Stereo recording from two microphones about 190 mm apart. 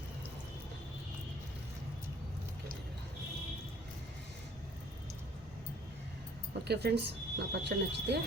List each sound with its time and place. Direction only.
6.7 s speech: 60° right (ahead or behind)